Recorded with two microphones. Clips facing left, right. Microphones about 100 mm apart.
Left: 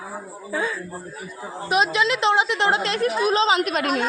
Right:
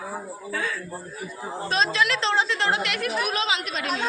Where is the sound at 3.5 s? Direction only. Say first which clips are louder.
Left 7 dB; 50° left (ahead or behind).